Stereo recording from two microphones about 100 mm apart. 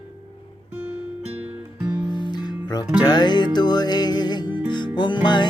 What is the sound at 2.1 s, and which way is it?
Music, 50° left (ahead or behind).